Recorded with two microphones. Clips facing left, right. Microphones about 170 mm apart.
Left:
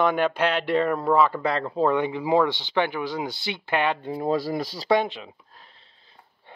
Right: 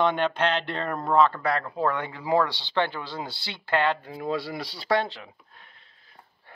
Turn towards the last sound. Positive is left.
turn(degrees=30)  # may be behind; listen again after turning